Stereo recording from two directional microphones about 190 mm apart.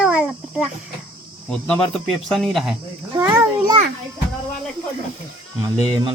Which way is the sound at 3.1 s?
15° right (ahead or behind).